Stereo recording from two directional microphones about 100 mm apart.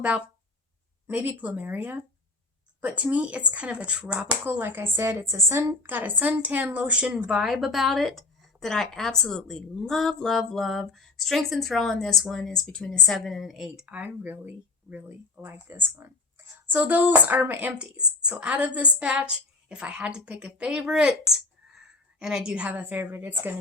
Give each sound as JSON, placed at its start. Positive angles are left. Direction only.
{"t": 1.0, "sound": "speech", "side_deg": -20}